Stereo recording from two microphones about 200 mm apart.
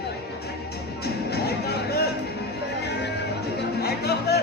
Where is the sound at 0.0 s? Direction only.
55° left (ahead or behind).